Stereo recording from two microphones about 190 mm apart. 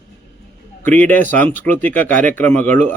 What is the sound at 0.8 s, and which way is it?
Speech, 10° left (ahead or behind).